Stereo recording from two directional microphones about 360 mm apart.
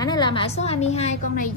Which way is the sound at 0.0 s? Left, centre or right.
Centre.